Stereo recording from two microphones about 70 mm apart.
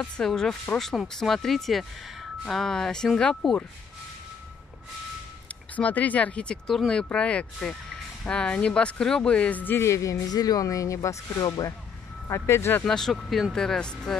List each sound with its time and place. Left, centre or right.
0.0 s speech: centre
5.8 s speech: left
9.8 s speech: left
12.3 s speech: left
12.8 s speech: centre